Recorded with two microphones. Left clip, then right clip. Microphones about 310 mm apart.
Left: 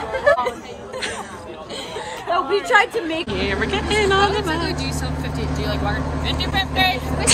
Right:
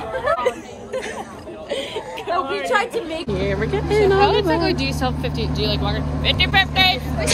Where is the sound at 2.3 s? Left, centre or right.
Left.